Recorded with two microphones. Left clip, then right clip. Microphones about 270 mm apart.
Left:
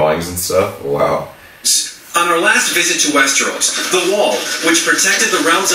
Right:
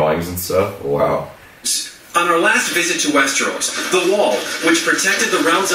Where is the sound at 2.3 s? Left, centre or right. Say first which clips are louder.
Left 2 dB; centre.